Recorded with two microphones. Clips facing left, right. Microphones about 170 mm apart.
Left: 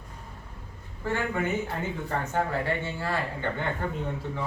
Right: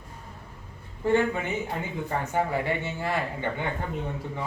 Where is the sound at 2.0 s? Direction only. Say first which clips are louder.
Right 2 dB; 10° right (ahead or behind).